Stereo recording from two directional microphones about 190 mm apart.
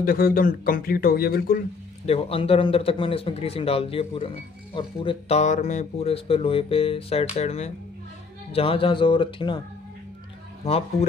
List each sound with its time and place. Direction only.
0.0 s a man's voice: 50° left (ahead or behind)
2.0 s speech: 30° left (ahead or behind)
10.6 s speech: 35° left (ahead or behind)